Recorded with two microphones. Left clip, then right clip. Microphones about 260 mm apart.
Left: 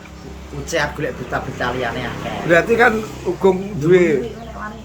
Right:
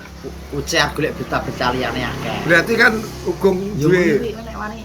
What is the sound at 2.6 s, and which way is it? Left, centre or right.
Speech, centre.